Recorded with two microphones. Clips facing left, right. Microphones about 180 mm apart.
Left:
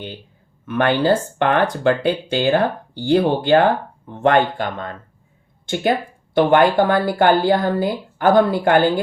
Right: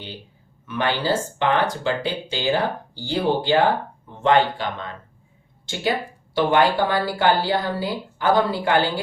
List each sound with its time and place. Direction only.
0.6 s a woman's voice: 55° left (ahead or behind)